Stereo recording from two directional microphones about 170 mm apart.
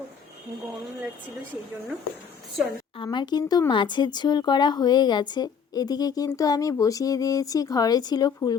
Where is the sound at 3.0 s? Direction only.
25° left (ahead or behind).